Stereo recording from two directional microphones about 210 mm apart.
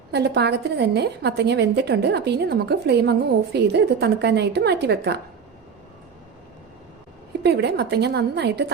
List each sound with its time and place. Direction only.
0.1 s a woman's voice: 50° right (ahead or behind)
7.4 s a woman's voice: 55° right (ahead or behind)